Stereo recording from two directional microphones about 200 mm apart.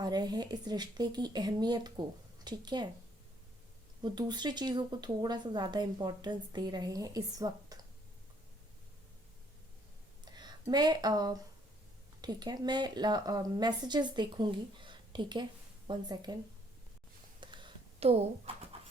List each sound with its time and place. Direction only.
0.0 s speech: 20° right (ahead or behind)
4.0 s speech: 20° right (ahead or behind)
10.3 s speech: 20° right (ahead or behind)
17.4 s a sound: 25° right (ahead or behind)